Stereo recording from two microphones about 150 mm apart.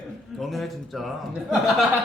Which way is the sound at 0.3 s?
Centre (ahead or behind).